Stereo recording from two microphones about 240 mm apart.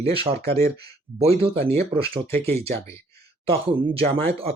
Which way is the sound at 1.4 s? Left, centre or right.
Right.